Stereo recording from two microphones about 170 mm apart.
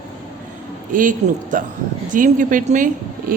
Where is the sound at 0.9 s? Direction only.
50° right (ahead or behind).